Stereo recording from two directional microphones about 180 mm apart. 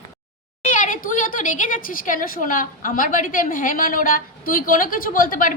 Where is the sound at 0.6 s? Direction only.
45° left (ahead or behind).